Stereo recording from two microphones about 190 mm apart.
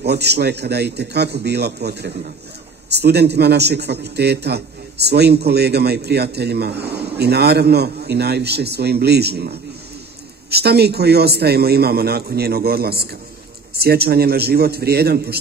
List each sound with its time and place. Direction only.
0.0 s a man's voice: 60° right (ahead or behind)